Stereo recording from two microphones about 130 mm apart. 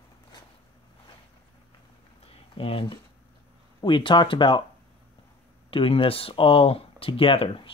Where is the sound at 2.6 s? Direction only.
45° left (ahead or behind).